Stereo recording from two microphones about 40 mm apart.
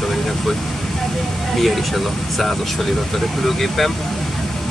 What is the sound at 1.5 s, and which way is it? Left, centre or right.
Speech, centre.